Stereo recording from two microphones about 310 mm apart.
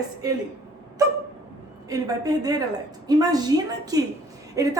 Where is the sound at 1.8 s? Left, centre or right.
Centre.